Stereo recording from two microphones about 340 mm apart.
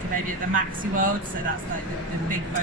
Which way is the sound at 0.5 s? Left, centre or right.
Right.